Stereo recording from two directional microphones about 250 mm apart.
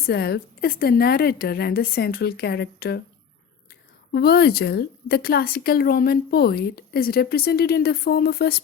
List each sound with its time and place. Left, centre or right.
0.0 s a woman's voice: left